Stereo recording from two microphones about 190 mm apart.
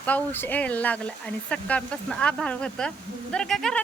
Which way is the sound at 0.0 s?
10° left (ahead or behind).